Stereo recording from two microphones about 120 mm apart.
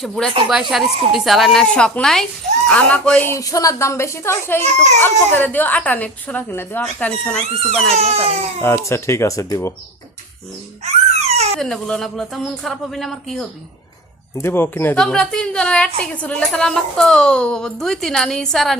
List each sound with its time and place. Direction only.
0.0 s a woman's voice: 5° left (ahead or behind)
3.2 s a woman's voice: 30° left (ahead or behind)
4.6 s a child's voice: 75° right (ahead or behind)
4.9 s speech: 15° left (ahead or behind)
6.8 s speech: 5° left (ahead or behind)
7.9 s crying: 60° right (ahead or behind)
8.6 s a woman's voice: 20° left (ahead or behind)
10.8 s babbling: 60° right (ahead or behind)
11.6 s a woman's voice: 5° left (ahead or behind)
14.3 s a woman's voice: 20° left (ahead or behind)
15.0 s a woman's voice: 5° left (ahead or behind)